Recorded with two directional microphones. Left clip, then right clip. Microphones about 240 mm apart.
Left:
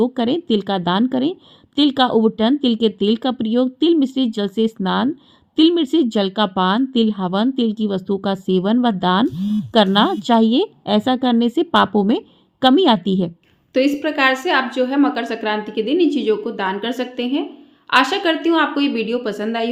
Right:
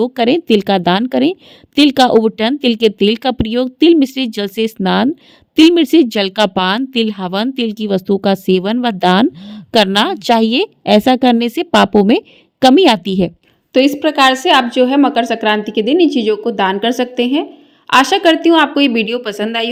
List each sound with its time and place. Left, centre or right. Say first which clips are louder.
0.0 s speech: right 6 dB; right
13.7 s a woman's voice: right 6 dB; right